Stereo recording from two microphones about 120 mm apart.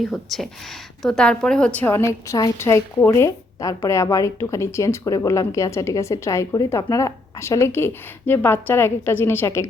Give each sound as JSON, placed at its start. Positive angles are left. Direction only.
{"t": 0.0, "sound": "a woman's voice", "side_deg": 0}